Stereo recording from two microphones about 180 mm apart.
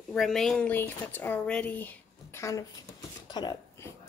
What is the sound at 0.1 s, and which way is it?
Speech, centre (ahead or behind).